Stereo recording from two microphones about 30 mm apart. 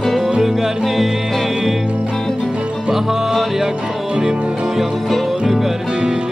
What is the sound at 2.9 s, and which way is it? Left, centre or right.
Music, centre.